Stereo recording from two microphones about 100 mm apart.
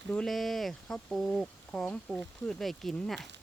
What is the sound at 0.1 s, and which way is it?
Speech, 5° left (ahead or behind).